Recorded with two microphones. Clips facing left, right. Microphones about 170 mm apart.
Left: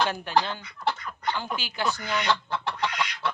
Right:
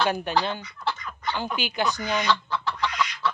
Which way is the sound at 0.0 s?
15° right (ahead or behind).